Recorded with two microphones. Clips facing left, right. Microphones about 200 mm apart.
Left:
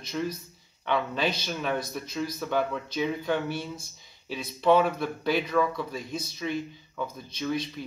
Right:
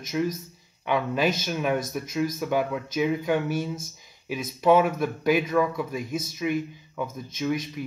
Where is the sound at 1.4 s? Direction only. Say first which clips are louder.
Right 4 dB; 10° right (ahead or behind).